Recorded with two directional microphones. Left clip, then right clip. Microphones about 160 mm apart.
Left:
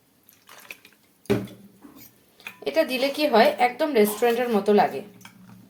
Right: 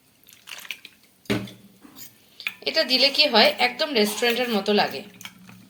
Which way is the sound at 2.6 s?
20° left (ahead or behind).